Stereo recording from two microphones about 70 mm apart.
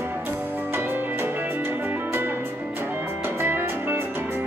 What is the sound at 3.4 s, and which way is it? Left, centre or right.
Music, right.